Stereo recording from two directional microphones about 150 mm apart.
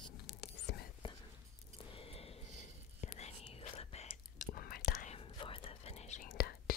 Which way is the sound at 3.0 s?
50° left (ahead or behind).